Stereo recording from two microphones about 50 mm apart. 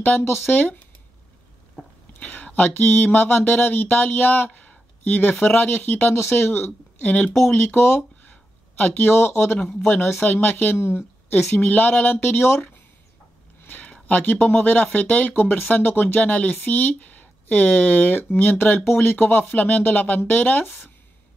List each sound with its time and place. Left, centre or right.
0.5 s speech: left
2.1 s speech: left
4.6 s a sound: left
5.4 s speech: left
8.2 s a sound: left
9.8 s speech: left
10.8 s speech: left
13.6 s a sound: left
14.0 s speech: left
15.3 s speech: left